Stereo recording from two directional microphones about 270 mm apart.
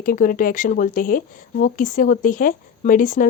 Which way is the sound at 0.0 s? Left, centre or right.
Left.